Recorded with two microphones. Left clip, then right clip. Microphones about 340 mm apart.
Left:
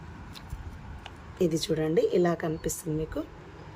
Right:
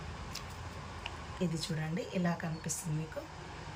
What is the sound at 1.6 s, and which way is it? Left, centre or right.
Speech, centre.